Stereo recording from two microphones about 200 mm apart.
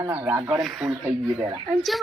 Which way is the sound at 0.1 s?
5° right (ahead or behind).